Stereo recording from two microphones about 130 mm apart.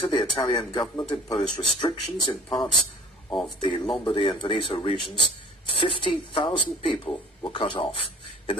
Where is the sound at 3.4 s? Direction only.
35° left (ahead or behind).